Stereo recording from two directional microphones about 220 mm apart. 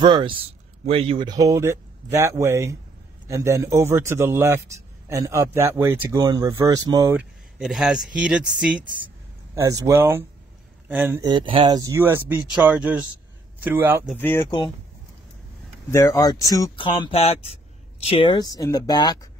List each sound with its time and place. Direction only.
0.0 s speech: 20° right (ahead or behind)
14.1 s speech: 10° left (ahead or behind)
15.9 s speech: 10° left (ahead or behind)